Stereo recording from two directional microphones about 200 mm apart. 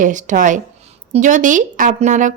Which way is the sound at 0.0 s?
40° right (ahead or behind).